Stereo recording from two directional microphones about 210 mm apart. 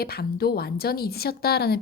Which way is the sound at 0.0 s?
45° left (ahead or behind).